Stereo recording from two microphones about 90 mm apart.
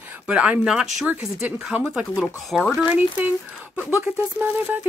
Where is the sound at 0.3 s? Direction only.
15° right (ahead or behind).